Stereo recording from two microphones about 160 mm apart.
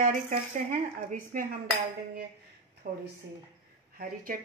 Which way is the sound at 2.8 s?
60° right (ahead or behind).